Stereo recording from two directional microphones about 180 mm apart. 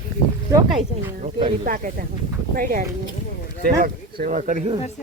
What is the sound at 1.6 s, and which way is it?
Speech, 50° right (ahead or behind).